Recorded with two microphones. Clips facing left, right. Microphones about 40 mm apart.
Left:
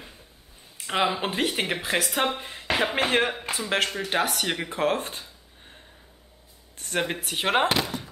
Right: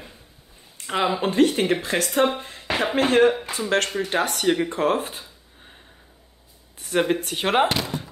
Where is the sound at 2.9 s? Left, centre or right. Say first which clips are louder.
Right 7 dB; left.